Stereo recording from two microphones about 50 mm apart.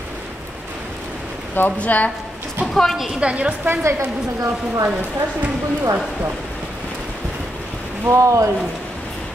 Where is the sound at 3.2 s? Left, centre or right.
Right.